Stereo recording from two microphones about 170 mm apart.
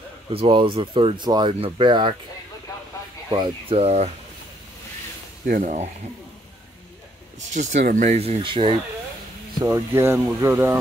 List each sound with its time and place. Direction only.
0.3 s speech: 30° right (ahead or behind)
3.3 s speech: 25° right (ahead or behind)
5.6 s speech: 45° right (ahead or behind)
7.5 s speech: 45° right (ahead or behind)
9.6 s speech: 15° right (ahead or behind)